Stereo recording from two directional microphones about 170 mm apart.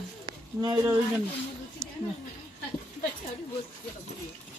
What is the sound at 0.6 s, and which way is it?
Speech, 15° right (ahead or behind).